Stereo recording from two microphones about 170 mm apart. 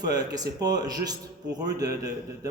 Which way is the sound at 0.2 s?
20° right (ahead or behind).